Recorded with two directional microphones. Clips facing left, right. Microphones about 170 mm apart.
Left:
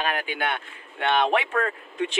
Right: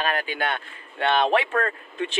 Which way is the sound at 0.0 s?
15° left (ahead or behind).